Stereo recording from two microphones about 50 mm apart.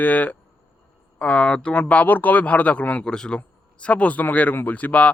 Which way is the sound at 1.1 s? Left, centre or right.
Left.